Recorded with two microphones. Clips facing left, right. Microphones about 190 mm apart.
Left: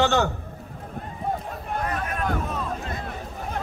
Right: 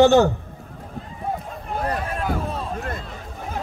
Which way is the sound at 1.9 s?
30° right (ahead or behind).